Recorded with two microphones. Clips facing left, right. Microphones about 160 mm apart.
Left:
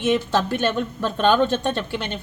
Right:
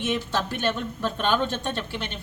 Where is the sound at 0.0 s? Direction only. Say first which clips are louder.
Left 6 dB; 85° left.